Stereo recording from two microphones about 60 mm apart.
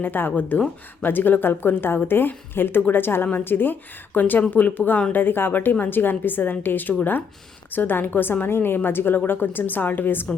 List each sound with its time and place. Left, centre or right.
0.0 s a woman's voice: left